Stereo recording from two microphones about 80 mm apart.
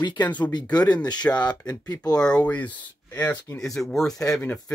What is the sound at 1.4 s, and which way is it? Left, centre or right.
Speech, left.